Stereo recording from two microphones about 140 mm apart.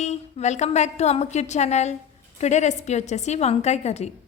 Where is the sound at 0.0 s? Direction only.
50° left (ahead or behind).